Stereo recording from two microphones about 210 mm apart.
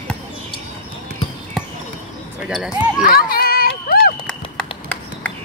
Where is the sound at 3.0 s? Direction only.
45° left (ahead or behind).